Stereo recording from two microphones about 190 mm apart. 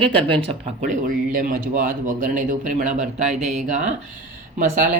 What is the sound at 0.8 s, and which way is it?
Speech, 45° right (ahead or behind).